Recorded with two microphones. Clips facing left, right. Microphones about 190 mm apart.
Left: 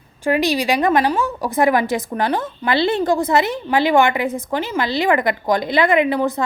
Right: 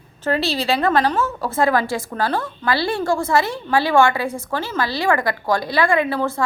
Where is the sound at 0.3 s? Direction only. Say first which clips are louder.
Left 3 dB; 15° left (ahead or behind).